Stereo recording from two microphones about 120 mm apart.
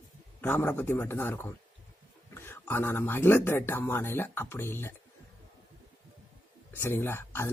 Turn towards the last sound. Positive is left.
turn(degrees=20)  # may be behind; listen again after turning